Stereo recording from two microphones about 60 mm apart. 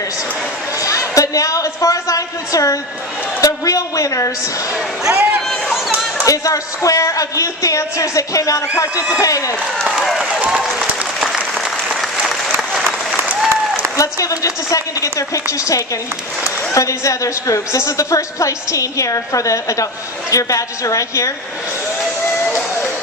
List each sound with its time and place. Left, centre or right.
0.7 s a sound: left
4.7 s speech: centre
6.2 s speech: left
10.5 s applause: centre
13.1 s applause: centre
13.9 s a woman's voice: left